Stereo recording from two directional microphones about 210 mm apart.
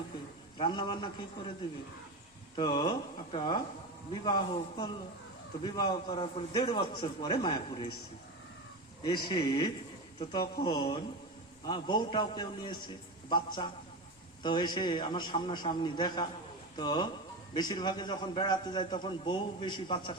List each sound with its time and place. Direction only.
0.6 s a man's voice: 20° left (ahead or behind)
2.6 s a man's voice: 20° left (ahead or behind)
9.0 s a man's voice: 25° left (ahead or behind)